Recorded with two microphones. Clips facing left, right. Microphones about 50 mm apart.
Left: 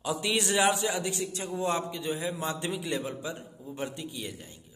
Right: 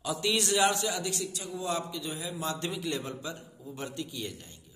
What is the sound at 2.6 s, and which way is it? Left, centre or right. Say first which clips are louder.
A man's voice: left 2 dB; centre.